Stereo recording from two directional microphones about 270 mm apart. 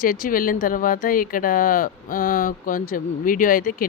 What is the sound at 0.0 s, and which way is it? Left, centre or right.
Speech, left.